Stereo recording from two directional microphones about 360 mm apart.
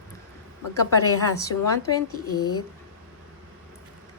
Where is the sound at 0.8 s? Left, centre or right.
Left.